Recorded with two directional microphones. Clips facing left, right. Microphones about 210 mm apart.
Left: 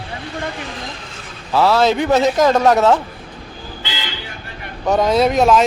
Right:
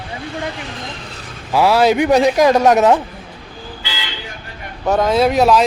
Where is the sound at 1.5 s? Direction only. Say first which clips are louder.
Right 1 dB; 10° right (ahead or behind).